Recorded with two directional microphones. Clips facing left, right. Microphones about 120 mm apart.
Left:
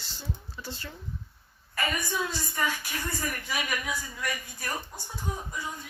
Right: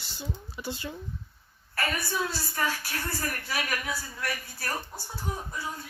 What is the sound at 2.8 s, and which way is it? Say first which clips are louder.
Speech: even; 15° left (ahead or behind).